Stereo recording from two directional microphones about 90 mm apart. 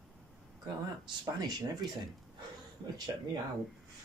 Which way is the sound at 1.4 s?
50° right (ahead or behind).